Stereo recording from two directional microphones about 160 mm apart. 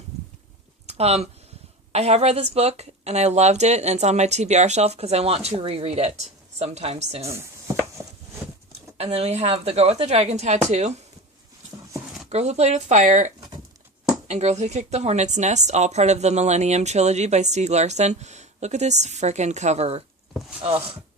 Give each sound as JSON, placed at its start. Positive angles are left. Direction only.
{"t": 0.9, "sound": "a woman's voice", "side_deg": -40}
{"t": 9.0, "sound": "a woman's voice", "side_deg": -40}
{"t": 12.3, "sound": "a woman's voice", "side_deg": -45}